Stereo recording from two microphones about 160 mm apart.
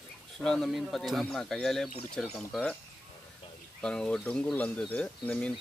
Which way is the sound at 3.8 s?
5° left (ahead or behind).